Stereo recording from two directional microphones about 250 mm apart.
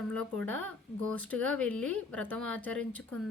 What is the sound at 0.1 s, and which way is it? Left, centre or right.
Speech, centre.